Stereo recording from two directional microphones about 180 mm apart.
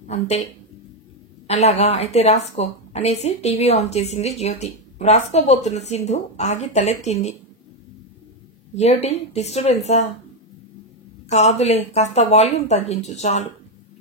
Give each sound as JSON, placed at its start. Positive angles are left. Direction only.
{"t": 0.1, "sound": "a woman's voice", "side_deg": 35}
{"t": 1.5, "sound": "a woman's voice", "side_deg": 40}
{"t": 8.7, "sound": "a woman's voice", "side_deg": 35}
{"t": 11.2, "sound": "a woman's voice", "side_deg": 40}